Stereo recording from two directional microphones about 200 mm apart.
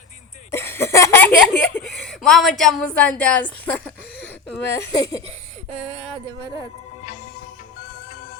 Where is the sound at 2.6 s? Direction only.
5° left (ahead or behind).